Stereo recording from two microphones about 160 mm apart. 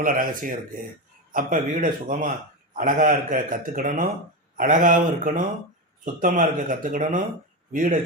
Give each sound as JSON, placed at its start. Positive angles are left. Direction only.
{"t": 0.0, "sound": "a man's voice", "side_deg": -60}